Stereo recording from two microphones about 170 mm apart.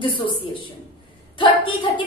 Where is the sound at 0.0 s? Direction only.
30° left (ahead or behind).